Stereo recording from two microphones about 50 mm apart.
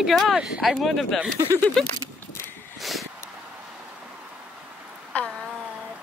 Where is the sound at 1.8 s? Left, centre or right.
Centre.